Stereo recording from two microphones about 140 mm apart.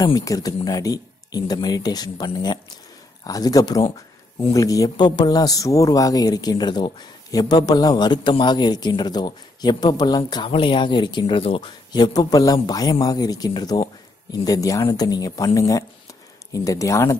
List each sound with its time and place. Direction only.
0.0 s speech: 25° left (ahead or behind)